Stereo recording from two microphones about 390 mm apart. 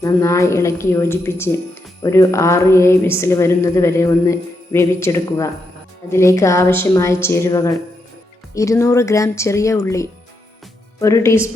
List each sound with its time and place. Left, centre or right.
0.0 s speech: centre